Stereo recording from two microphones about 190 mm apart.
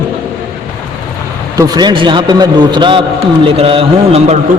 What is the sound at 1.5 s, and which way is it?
A man's voice, 20° right (ahead or behind).